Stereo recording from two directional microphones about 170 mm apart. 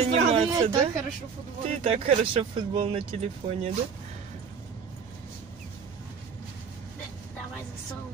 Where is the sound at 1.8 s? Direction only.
35° right (ahead or behind).